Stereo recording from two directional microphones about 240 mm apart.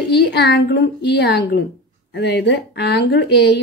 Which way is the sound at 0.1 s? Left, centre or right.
Left.